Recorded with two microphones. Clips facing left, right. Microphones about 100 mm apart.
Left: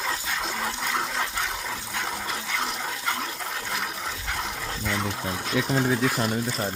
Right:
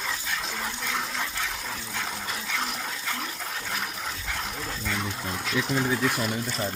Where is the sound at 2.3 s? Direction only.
30° left (ahead or behind).